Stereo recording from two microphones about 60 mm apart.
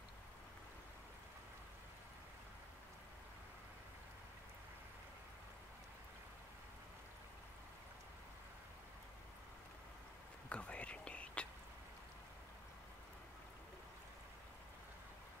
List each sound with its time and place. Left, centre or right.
10.5 s whispering: centre